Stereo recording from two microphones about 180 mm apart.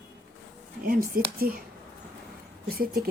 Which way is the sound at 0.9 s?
50° right (ahead or behind).